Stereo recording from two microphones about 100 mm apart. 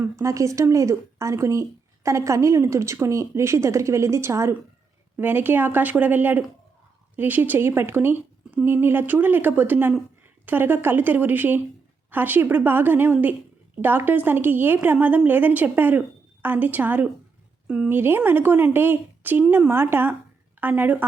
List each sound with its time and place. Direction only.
0.0 s a woman's voice: 30° right (ahead or behind)